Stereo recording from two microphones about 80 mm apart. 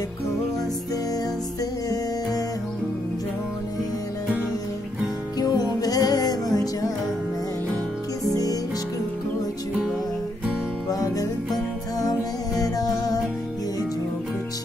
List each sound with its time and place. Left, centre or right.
5.4 s music: left
8.3 s music: left
10.9 s music: left